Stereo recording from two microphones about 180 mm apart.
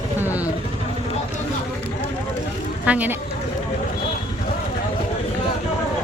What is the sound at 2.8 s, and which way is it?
Speech, 10° right (ahead or behind).